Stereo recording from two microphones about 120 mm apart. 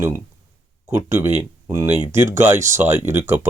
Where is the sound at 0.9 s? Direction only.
25° right (ahead or behind).